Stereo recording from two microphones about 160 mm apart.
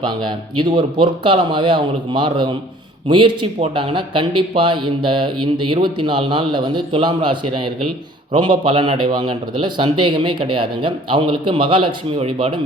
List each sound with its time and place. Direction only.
0.0 s speech: 30° right (ahead or behind)